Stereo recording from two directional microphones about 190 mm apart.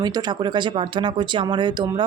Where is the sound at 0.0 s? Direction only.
20° right (ahead or behind).